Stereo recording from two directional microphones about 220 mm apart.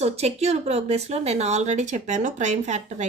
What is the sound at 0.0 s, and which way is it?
A woman's voice, 30° right (ahead or behind).